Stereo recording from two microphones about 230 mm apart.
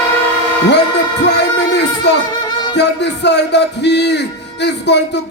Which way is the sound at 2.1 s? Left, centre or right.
Left.